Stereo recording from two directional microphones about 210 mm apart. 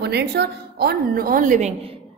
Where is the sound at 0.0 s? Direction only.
50° right (ahead or behind).